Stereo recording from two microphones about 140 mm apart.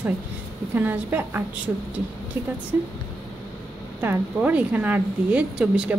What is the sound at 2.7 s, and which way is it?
Speech, 15° right (ahead or behind).